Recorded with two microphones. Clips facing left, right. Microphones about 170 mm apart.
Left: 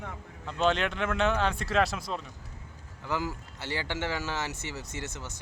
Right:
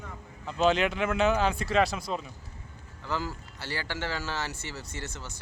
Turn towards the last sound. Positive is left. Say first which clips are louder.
# left 1 dB
turn(degrees=20)  # may be behind; listen again after turning